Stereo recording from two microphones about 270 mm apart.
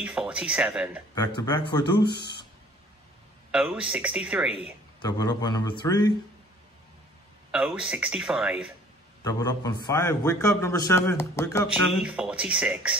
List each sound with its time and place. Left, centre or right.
0.0 s speech: centre
1.1 s a man's voice: centre
3.5 s speech: centre
5.0 s a man's voice: centre
7.5 s speech: centre
9.2 s a man's voice: centre
11.9 s speech: centre